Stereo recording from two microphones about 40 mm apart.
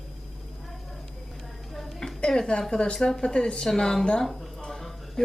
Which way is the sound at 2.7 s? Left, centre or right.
Centre.